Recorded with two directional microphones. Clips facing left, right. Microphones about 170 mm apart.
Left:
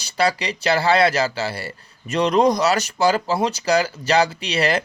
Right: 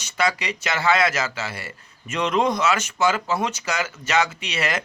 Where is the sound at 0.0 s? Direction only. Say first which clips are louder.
Left 3 dB; 35° left (ahead or behind).